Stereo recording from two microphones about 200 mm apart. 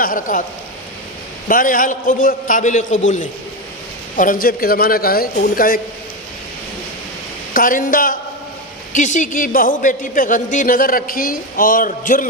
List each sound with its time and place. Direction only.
0.0 s a woman's voice: 45° left (ahead or behind)
1.5 s a woman's voice: 45° left (ahead or behind)
4.2 s a woman's voice: 45° left (ahead or behind)
7.5 s a woman's voice: 45° left (ahead or behind)